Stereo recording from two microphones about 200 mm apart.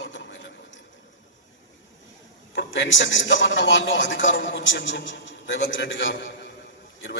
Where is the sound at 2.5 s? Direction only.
65° left (ahead or behind).